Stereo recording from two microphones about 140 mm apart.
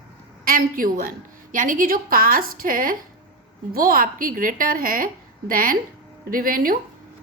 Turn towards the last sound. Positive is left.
turn(degrees=-90)